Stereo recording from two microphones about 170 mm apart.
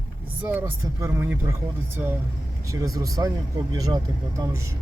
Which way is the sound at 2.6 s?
20° right (ahead or behind).